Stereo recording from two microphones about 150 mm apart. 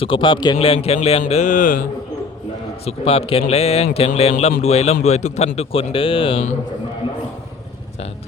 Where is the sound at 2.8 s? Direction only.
40° left (ahead or behind).